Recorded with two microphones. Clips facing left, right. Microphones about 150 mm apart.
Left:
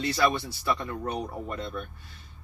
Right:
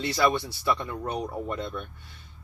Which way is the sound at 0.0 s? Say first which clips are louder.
Right 1 dB; 25° right (ahead or behind).